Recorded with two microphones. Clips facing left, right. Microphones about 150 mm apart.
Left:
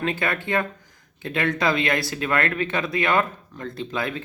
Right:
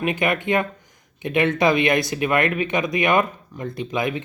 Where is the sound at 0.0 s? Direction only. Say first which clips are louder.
Right 4 dB; 15° right (ahead or behind).